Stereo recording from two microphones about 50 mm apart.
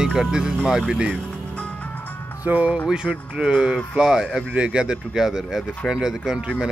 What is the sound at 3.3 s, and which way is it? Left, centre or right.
Speech, centre.